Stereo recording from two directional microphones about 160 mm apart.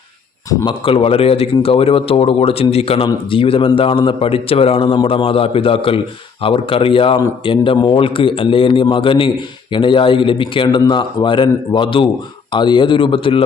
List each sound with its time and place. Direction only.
0.5 s speech: 30° left (ahead or behind)